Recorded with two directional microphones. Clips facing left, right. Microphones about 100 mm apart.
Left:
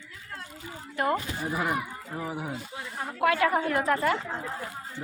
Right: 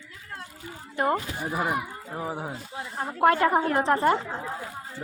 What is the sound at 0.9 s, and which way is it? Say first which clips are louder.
Speech: right 2 dB; 20° right (ahead or behind).